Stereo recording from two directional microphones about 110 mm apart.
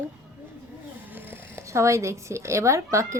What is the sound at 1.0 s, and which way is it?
Speech, 20° right (ahead or behind).